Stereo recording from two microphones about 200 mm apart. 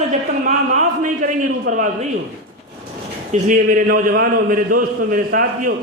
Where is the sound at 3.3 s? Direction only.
40° right (ahead or behind).